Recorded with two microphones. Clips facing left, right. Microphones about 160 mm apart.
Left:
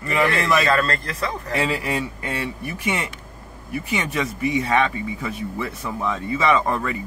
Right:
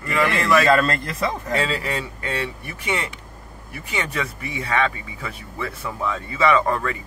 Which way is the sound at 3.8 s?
15° left (ahead or behind).